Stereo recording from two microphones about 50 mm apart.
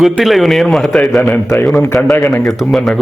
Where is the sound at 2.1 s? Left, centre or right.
Left.